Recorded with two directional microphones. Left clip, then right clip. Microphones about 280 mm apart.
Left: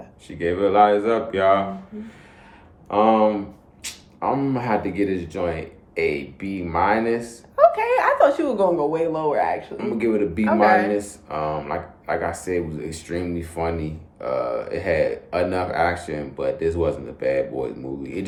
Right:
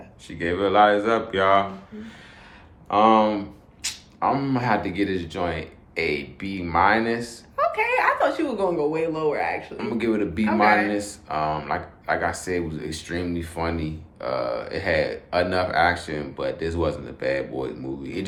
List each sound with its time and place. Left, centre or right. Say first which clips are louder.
0.3 s speech: left 2 dB; centre
7.5 s speech: left 6 dB; centre
9.7 s speech: left 3 dB; centre
10.4 s a man's voice: left 2 dB; centre
10.8 s speech: left 2 dB; centre